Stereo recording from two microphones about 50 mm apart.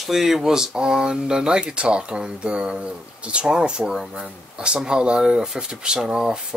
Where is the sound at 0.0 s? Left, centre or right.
Centre.